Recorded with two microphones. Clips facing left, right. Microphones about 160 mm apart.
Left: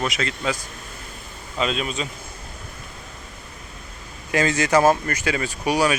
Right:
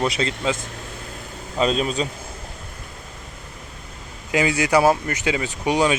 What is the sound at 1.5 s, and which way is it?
Speech, 35° right (ahead or behind).